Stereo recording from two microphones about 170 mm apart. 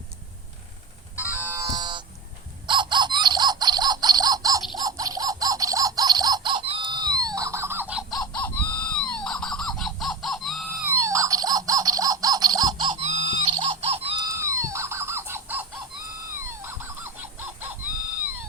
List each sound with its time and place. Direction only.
1.2 s music: 10° right (ahead or behind)
1.7 s buzzer: 25° right (ahead or behind)
2.6 s a sound: 25° right (ahead or behind)
4.8 s music: 20° right (ahead or behind)
8.2 s fowl: 10° left (ahead or behind)
10.8 s music: 15° right (ahead or behind)
13.0 s a sound: 40° right (ahead or behind)
14.2 s chicken: 20° right (ahead or behind)
16.3 s a sound: 15° right (ahead or behind)